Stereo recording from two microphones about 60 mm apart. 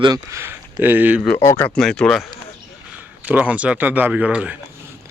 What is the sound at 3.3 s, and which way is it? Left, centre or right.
Speech, right.